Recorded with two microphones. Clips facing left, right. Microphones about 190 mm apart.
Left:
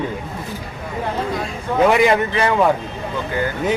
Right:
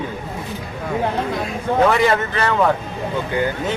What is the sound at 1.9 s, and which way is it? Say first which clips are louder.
Speech: left 2 dB; 15° left (ahead or behind).